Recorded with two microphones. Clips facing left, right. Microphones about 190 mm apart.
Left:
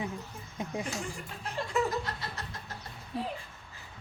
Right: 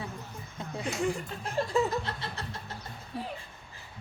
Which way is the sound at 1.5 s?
35° right (ahead or behind).